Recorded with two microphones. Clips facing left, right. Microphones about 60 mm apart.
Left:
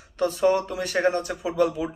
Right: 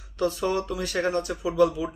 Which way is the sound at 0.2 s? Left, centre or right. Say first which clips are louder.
Left 4 dB; left.